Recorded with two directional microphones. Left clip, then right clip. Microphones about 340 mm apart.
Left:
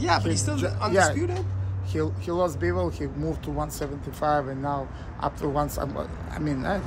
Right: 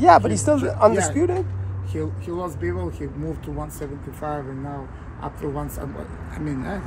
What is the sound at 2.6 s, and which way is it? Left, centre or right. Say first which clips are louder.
Speech: left 1 dB; left.